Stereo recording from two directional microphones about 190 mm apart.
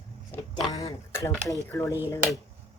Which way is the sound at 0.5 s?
20° left (ahead or behind).